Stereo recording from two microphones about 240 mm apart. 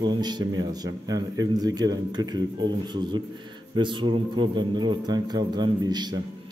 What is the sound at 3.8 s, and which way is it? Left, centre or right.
A man's voice, centre.